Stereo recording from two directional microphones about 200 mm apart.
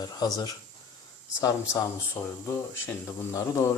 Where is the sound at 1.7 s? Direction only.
15° left (ahead or behind).